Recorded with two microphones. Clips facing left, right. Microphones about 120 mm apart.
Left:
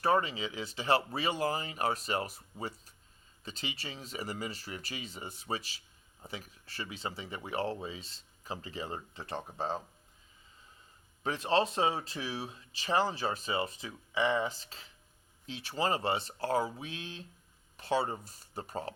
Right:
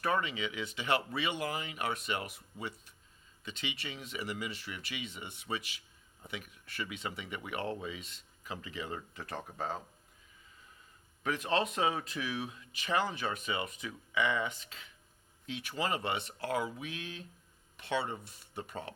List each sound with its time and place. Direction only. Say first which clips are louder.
0.0 s speech: left 4 dB; 35° left (ahead or behind)
11.2 s speech: left 3 dB; 30° left (ahead or behind)